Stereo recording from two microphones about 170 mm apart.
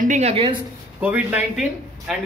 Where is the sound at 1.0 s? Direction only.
10° right (ahead or behind).